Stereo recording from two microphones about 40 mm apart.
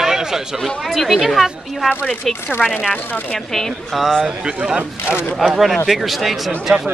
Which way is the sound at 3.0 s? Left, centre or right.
Left.